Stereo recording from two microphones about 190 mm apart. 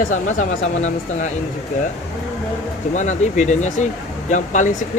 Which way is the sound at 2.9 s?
40° left (ahead or behind).